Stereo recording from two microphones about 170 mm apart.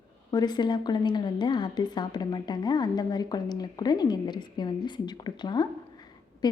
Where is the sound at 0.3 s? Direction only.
25° left (ahead or behind).